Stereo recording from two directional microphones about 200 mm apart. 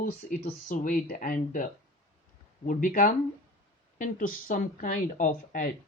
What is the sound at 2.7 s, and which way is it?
Speech, 40° left (ahead or behind).